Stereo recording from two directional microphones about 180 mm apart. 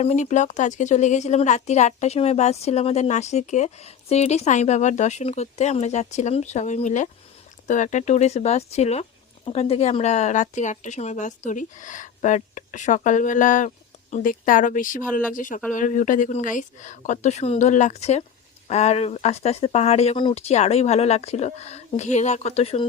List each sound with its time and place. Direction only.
0.0 s a woman's voice: 40° left (ahead or behind)